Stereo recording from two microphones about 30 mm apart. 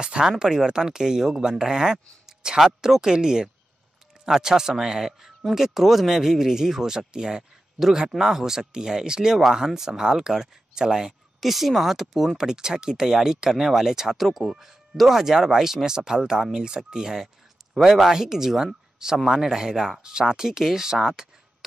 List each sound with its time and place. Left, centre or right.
0.0 s speech: right
7.1 s speech: right
11.4 s speech: centre
12.4 s speech: right
14.1 s speech: centre
15.0 s speech: centre